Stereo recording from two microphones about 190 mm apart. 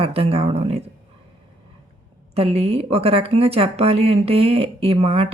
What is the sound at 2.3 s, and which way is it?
Speech, 30° right (ahead or behind).